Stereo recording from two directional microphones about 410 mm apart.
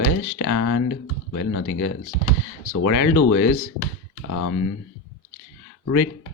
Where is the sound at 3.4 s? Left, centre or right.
Left.